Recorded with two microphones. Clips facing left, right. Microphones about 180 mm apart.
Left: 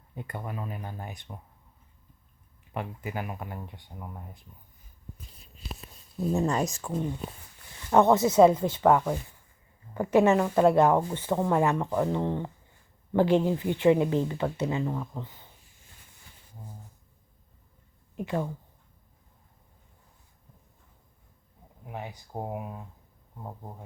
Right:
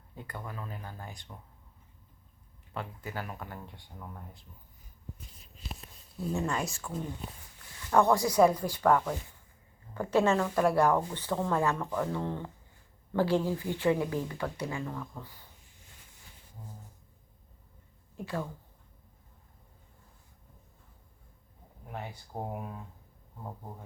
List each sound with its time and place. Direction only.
0.2 s a woman's voice: 20° left (ahead or behind)
2.7 s speech: 15° left (ahead or behind)
6.3 s speech: 40° left (ahead or behind)
7.9 s a woman's voice: 20° left (ahead or behind)
18.2 s speech: 20° left (ahead or behind)
21.9 s speech: 15° left (ahead or behind)